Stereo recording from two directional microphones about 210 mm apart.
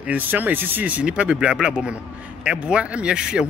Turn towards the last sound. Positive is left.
turn(degrees=-5)  # may be behind; listen again after turning